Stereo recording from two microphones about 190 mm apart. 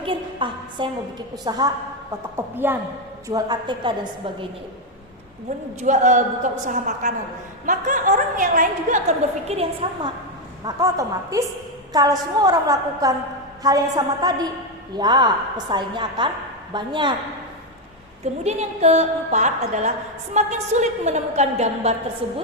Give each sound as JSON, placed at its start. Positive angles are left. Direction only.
{"t": 0.0, "sound": "a sound", "side_deg": -25}
{"t": 1.5, "sound": "a woman's voice", "side_deg": -20}
{"t": 2.3, "sound": "a woman's voice", "side_deg": -10}
{"t": 5.8, "sound": "a woman's voice", "side_deg": -40}
{"t": 10.6, "sound": "a woman's voice", "side_deg": -20}
{"t": 18.4, "sound": "a woman's voice", "side_deg": -35}